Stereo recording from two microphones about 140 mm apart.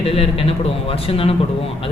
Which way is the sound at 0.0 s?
45° left (ahead or behind).